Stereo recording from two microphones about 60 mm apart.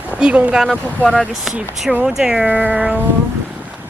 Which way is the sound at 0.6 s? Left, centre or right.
Centre.